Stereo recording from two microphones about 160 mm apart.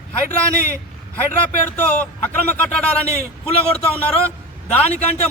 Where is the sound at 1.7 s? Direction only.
10° left (ahead or behind).